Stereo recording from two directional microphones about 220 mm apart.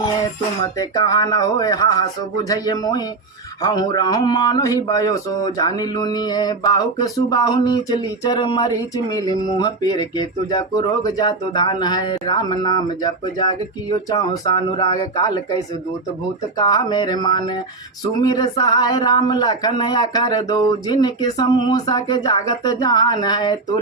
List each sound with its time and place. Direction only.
0.6 s mantra: 15° left (ahead or behind)
16.6 s speech: 20° left (ahead or behind)